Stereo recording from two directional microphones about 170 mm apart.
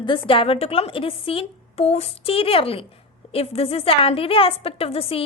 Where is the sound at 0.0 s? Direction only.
30° left (ahead or behind).